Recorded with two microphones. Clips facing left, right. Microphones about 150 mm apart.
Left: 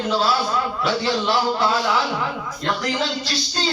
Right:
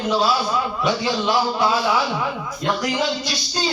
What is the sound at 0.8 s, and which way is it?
A man's voice, 15° right (ahead or behind).